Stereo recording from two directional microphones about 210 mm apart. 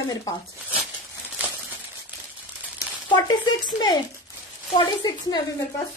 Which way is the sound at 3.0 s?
20° left (ahead or behind).